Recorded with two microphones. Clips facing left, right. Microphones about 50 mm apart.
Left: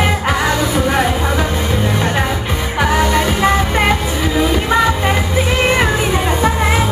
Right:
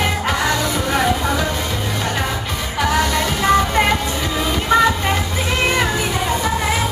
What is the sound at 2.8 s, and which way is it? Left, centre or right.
Music, centre.